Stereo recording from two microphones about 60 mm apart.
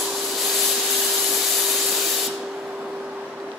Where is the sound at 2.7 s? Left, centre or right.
Centre.